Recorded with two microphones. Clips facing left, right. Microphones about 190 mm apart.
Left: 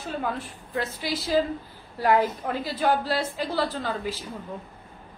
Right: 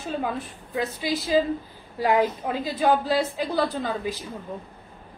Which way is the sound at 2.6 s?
15° right (ahead or behind).